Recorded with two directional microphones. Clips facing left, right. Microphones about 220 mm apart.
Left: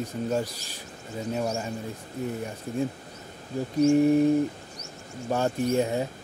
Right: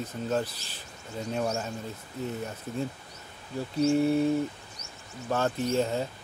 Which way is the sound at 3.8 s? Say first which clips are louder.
Left 4 dB; 10° left (ahead or behind).